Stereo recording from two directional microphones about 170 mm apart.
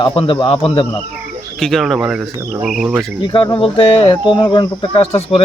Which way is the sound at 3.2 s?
30° left (ahead or behind).